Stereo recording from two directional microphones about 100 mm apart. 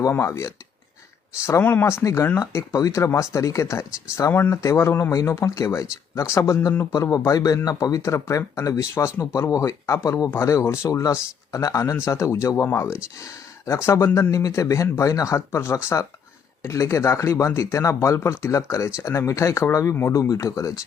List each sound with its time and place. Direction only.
0.1 s speech: 30° left (ahead or behind)
4.3 s speech: 20° left (ahead or behind)